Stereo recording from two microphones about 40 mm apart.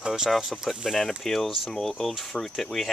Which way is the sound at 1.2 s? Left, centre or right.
Centre.